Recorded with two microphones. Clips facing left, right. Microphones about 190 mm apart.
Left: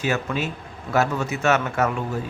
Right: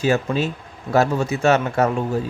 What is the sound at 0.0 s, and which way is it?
Speech, 30° right (ahead or behind).